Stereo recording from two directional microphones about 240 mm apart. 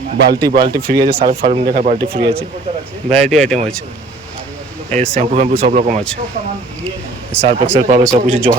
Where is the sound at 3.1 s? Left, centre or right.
Centre.